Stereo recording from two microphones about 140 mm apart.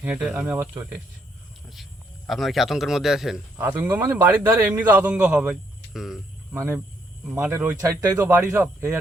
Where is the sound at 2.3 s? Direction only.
Centre (ahead or behind).